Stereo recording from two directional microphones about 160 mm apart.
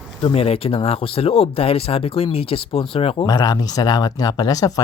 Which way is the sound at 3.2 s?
25° left (ahead or behind).